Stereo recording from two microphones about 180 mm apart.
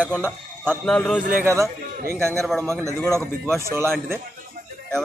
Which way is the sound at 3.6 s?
15° right (ahead or behind).